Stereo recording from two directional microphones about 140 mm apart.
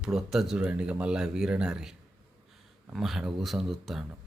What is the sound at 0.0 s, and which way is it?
Speech, 5° right (ahead or behind).